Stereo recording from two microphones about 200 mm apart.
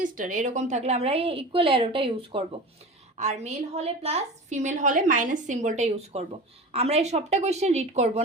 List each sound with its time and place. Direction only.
0.0 s a woman's voice: 40° right (ahead or behind)